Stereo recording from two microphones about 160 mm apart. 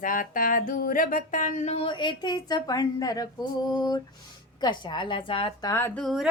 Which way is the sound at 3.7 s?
25° left (ahead or behind).